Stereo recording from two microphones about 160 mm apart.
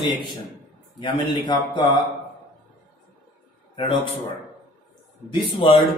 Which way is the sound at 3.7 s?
30° left (ahead or behind).